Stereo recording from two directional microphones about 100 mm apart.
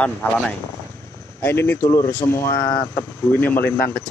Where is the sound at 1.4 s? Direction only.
25° left (ahead or behind).